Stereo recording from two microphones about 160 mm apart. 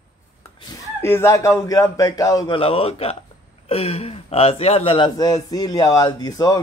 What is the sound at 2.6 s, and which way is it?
Speech, 35° left (ahead or behind).